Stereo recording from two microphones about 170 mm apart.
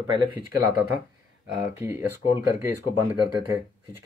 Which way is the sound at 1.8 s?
15° right (ahead or behind).